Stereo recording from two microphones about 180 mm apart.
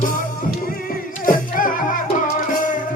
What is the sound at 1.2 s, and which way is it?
Music, 50° left (ahead or behind).